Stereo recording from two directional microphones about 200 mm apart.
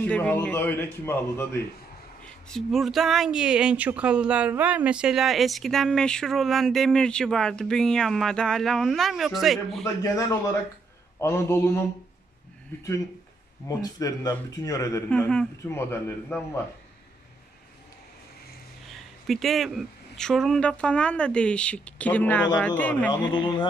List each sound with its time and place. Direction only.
0.0 s a man's voice: 5° left (ahead or behind)
2.5 s speech: centre (ahead or behind)
10.0 s a man's voice: 15° left (ahead or behind)
13.7 s a man's voice: 20° left (ahead or behind)
19.2 s a man's voice: centre (ahead or behind)